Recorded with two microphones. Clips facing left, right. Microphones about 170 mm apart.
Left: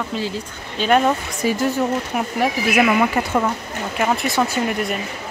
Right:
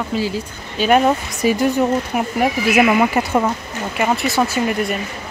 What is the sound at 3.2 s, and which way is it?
Speech, 20° right (ahead or behind).